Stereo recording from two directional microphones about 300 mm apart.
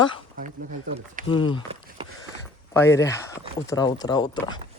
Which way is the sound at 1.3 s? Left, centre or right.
Centre.